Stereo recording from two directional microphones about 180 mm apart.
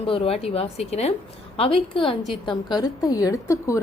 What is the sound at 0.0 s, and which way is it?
A woman's voice, 30° left (ahead or behind).